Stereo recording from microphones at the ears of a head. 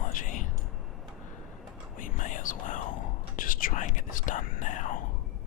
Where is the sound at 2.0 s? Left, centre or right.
Left.